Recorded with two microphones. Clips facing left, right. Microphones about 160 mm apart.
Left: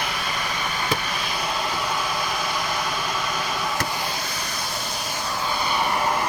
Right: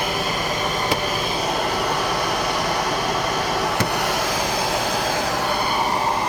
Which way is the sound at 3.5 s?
70° right (ahead or behind).